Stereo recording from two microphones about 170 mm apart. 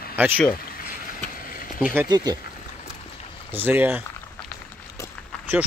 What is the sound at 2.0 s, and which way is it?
Speech, 25° right (ahead or behind).